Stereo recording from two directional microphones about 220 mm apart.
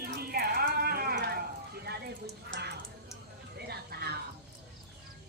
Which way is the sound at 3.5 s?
45° right (ahead or behind).